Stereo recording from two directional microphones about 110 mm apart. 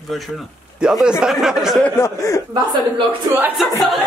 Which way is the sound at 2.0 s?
25° left (ahead or behind).